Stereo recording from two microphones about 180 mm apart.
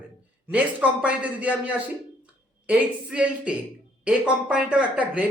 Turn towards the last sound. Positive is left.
turn(degrees=-5)  # may be behind; listen again after turning